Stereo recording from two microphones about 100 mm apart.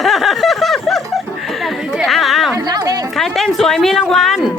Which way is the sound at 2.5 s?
40° right (ahead or behind).